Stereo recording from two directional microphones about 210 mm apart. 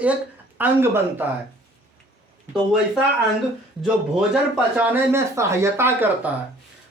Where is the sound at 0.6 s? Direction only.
10° right (ahead or behind).